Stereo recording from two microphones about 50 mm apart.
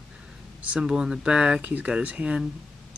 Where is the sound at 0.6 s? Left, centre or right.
Centre.